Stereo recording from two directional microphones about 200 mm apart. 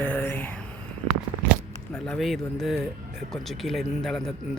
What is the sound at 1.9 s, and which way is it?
A man's voice, centre (ahead or behind).